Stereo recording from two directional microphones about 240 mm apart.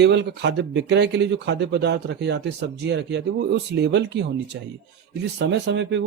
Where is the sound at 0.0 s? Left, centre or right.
Right.